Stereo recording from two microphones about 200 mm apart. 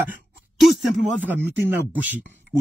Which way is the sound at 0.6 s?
Centre (ahead or behind).